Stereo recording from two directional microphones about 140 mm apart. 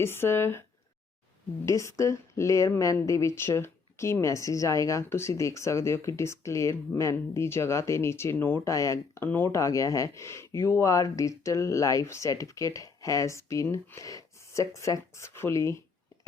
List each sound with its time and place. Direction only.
0.0 s speech: 15° left (ahead or behind)
1.6 s speech: 20° left (ahead or behind)